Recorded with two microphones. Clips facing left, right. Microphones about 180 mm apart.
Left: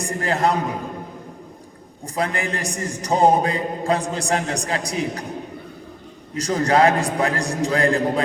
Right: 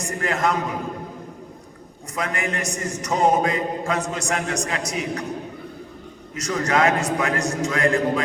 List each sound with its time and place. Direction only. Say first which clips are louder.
0.0 s a man's voice: left 2 dB; 35° left (ahead or behind)
2.1 s a man's voice: left 2 dB; 35° left (ahead or behind)
6.3 s a man's voice: left 4 dB; 30° left (ahead or behind)